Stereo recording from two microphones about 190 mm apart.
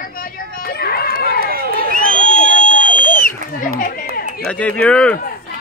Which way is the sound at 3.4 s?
45° left (ahead or behind).